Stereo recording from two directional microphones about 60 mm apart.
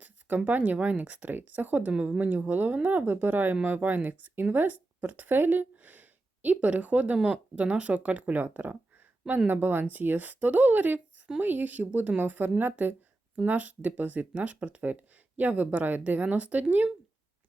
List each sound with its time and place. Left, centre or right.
0.0 s speech: right